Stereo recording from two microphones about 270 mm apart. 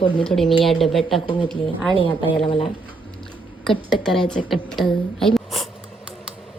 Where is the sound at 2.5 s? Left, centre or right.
Centre.